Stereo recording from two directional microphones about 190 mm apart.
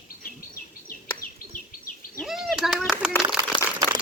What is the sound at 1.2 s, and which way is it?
Bird, 45° left (ahead or behind).